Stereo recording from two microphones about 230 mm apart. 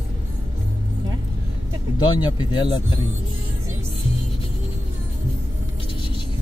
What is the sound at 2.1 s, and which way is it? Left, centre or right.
Speech, centre.